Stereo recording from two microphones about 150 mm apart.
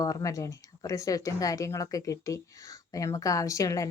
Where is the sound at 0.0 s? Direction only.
20° left (ahead or behind).